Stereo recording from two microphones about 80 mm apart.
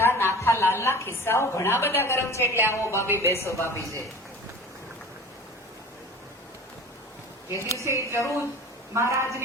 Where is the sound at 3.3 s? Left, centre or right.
Left.